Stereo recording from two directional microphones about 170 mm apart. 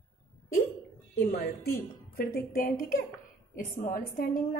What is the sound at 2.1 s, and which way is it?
A woman's voice, 60° left (ahead or behind).